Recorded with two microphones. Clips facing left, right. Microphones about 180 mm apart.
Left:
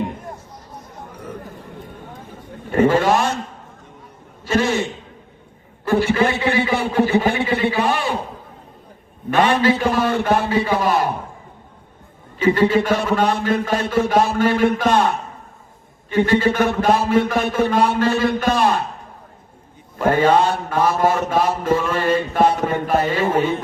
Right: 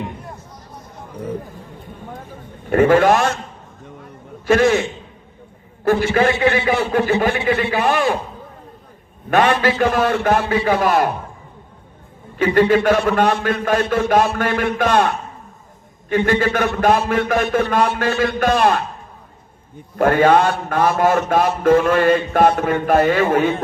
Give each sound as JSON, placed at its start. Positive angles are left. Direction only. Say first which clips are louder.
{"t": 2.7, "sound": "mantra", "louder": "right 3 dB", "side_deg": -50}
{"t": 4.4, "sound": "a man's voice", "louder": "right 5 dB", "side_deg": -55}
{"t": 5.8, "sound": "a man's voice", "louder": "right 2 dB", "side_deg": -55}
{"t": 6.9, "sound": "mantra", "louder": "left 3 dB", "side_deg": -55}
{"t": 9.3, "sound": "a man's voice", "louder": "even", "side_deg": -55}
{"t": 10.2, "sound": "mantra", "louder": "right 1 dB", "side_deg": -55}
{"t": 12.4, "sound": "mantra", "louder": "right 1 dB", "side_deg": -50}
{"t": 20.0, "sound": "mantra", "louder": "right 2 dB", "side_deg": -50}